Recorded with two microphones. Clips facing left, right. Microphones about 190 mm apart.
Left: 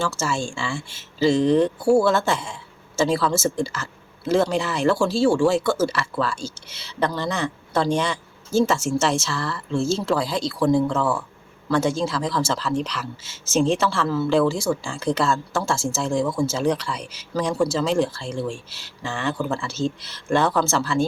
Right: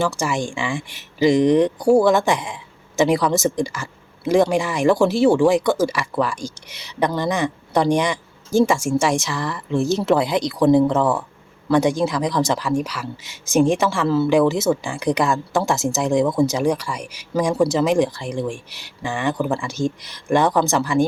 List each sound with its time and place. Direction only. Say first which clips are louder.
0.0 s speech: right 3 dB; 15° right (ahead or behind)